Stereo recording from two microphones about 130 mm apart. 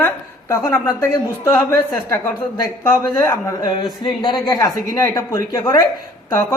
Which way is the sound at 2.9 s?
20° left (ahead or behind).